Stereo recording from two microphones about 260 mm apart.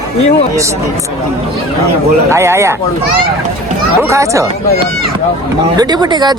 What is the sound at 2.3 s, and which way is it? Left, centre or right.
Speech, centre.